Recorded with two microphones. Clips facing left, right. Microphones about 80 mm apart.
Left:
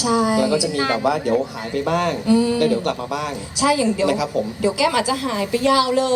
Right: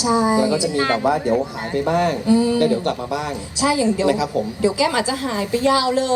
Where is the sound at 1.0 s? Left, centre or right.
Right.